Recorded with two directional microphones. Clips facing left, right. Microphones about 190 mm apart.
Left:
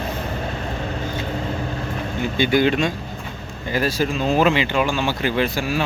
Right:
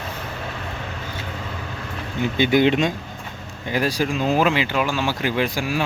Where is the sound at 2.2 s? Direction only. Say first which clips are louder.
Right 1 dB; 20° right (ahead or behind).